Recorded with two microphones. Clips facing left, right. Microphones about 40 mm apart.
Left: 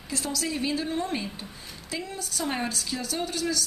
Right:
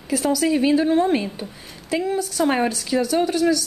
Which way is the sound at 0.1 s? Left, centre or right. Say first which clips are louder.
Right 11 dB; right.